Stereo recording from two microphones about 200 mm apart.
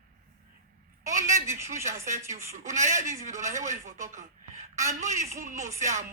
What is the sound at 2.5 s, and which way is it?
Speech, 35° right (ahead or behind).